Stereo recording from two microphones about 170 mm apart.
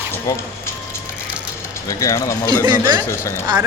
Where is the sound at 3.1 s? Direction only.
15° left (ahead or behind).